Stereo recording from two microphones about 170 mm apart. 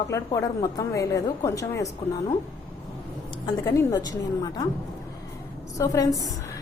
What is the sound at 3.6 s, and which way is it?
A woman's voice, 15° left (ahead or behind).